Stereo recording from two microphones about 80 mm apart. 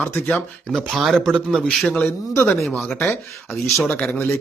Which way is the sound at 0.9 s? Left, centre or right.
Centre.